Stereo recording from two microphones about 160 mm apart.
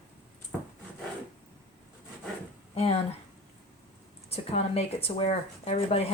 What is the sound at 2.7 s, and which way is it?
Speech, 40° left (ahead or behind).